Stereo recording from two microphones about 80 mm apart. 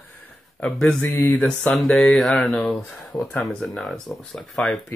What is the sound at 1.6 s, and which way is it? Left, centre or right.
Speech, centre.